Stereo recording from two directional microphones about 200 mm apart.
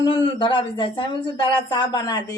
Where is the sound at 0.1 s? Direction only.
25° left (ahead or behind).